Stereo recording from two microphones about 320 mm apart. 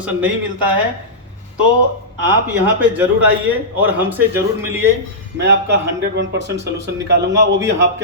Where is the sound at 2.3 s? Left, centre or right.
Centre.